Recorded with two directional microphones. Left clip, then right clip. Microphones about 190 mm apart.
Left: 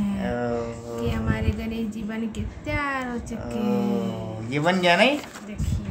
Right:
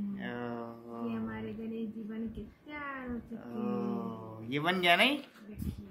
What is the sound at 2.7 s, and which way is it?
Speech, 55° left (ahead or behind).